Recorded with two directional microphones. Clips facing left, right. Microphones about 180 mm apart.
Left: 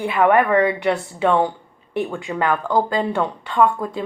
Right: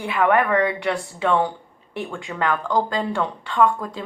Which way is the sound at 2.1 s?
15° left (ahead or behind).